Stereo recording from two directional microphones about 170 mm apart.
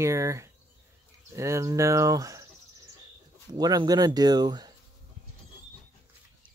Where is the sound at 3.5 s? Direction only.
25° right (ahead or behind).